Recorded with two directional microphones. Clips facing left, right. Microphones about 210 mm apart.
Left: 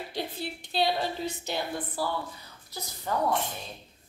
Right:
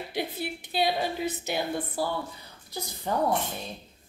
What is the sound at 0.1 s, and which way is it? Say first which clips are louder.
A woman's voice: right 5 dB; 10° right (ahead or behind).